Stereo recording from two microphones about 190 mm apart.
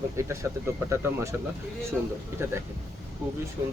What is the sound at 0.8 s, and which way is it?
Speech, 15° right (ahead or behind).